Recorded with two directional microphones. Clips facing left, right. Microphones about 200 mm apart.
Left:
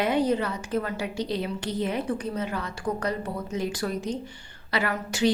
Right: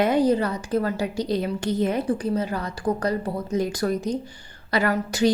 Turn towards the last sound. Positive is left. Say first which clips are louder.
# right 4 dB
turn(degrees=-40)  # may be behind; listen again after turning